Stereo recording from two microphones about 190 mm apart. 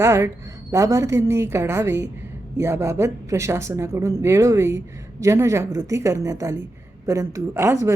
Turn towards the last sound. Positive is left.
turn(degrees=-15)  # may be behind; listen again after turning